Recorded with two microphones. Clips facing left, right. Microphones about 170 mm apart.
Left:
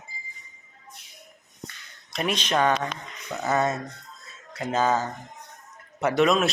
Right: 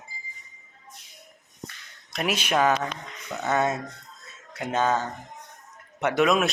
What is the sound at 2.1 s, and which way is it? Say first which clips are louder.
Speech: even; 5° right (ahead or behind).